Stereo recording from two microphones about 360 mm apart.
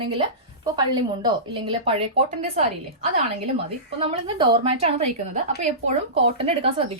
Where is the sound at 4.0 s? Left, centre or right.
Centre.